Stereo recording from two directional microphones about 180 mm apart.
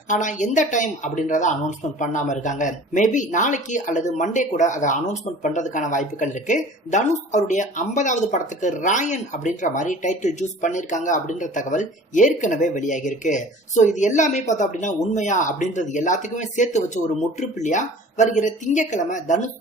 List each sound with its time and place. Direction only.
0.1 s speech: 45° left (ahead or behind)